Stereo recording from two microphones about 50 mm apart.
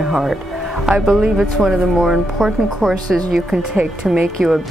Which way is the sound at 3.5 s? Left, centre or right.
Centre.